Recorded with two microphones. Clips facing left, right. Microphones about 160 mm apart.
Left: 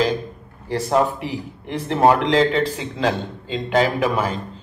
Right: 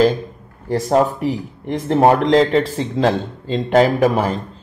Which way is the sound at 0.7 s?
40° right (ahead or behind).